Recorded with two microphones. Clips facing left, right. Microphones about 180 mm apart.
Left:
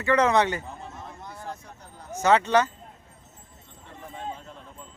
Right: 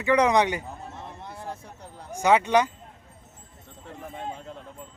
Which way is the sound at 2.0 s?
15° right (ahead or behind).